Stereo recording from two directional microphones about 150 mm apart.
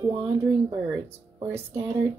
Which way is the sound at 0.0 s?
30° right (ahead or behind).